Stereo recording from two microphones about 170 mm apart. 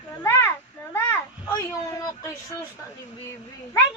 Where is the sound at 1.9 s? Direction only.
20° left (ahead or behind).